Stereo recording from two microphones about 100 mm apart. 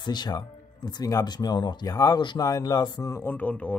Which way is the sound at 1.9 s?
30° left (ahead or behind).